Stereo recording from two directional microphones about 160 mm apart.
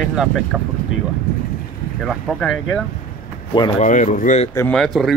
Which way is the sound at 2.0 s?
Centre (ahead or behind).